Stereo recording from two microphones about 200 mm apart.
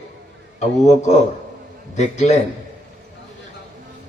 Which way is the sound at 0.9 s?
35° left (ahead or behind).